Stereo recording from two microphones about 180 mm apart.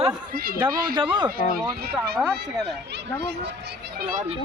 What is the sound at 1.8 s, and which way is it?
Speech, 60° right (ahead or behind).